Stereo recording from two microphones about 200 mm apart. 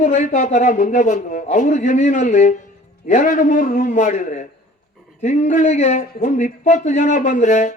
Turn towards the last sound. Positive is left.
turn(degrees=35)  # may be behind; listen again after turning